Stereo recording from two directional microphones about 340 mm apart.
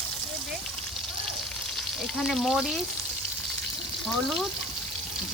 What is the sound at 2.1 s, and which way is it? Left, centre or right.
Speech, centre.